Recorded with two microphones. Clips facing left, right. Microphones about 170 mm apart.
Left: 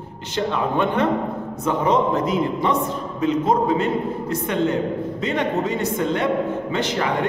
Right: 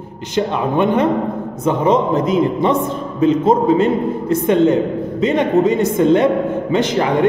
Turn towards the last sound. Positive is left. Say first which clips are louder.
# right 7 dB
turn(degrees=-20)  # may be behind; listen again after turning